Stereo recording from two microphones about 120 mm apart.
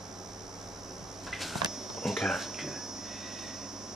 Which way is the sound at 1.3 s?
Centre (ahead or behind).